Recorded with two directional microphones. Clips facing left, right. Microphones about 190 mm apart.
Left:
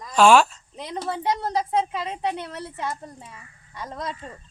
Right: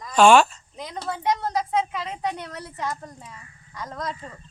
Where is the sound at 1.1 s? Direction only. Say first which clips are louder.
Right 1 dB; 30° left (ahead or behind).